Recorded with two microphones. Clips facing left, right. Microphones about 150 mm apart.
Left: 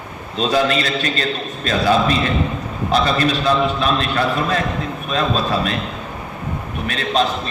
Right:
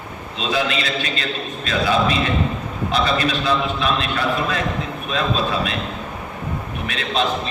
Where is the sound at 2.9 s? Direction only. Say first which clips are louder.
Left 3 dB; 40° left (ahead or behind).